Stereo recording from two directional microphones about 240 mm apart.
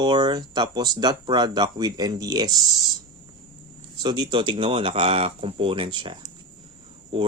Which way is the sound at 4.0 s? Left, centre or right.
Centre.